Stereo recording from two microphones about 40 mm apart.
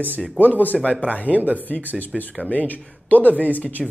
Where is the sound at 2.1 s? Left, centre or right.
Centre.